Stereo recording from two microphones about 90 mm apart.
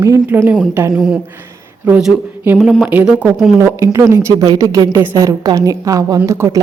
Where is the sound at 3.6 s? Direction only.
35° right (ahead or behind).